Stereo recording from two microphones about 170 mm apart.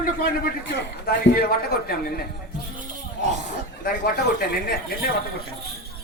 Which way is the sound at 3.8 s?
60° left (ahead or behind).